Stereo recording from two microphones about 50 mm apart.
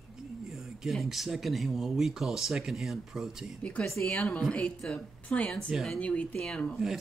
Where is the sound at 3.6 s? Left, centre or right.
Left.